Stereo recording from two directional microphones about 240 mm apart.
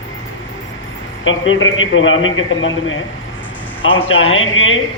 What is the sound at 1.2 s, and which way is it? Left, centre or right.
A man's voice, left.